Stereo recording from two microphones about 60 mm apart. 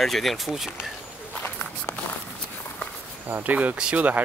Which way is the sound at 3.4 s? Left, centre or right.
Right.